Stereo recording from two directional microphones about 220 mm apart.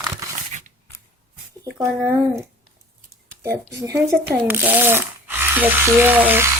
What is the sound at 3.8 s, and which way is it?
Speech, 15° right (ahead or behind).